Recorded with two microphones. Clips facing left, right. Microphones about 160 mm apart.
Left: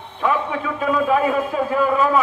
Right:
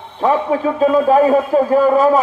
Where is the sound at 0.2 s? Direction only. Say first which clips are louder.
Right 6 dB; 35° right (ahead or behind).